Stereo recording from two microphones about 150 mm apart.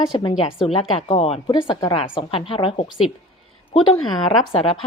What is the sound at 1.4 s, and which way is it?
A woman's voice, 30° left (ahead or behind).